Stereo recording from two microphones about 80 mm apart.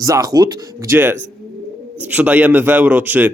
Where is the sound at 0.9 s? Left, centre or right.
Right.